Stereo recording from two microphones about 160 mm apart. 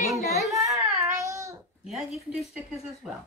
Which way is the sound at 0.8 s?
20° right (ahead or behind).